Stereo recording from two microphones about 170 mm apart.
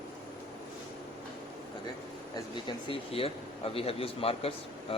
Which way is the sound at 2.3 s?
30° left (ahead or behind).